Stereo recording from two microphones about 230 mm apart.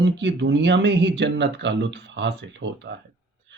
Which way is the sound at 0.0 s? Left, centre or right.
Right.